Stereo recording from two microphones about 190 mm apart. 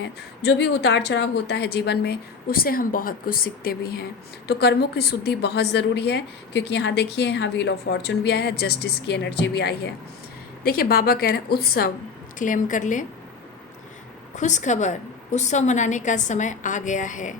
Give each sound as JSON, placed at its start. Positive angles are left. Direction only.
{"t": 0.4, "sound": "a woman's voice", "side_deg": 65}
{"t": 12.4, "sound": "a woman's voice", "side_deg": 45}
{"t": 14.3, "sound": "a woman's voice", "side_deg": 40}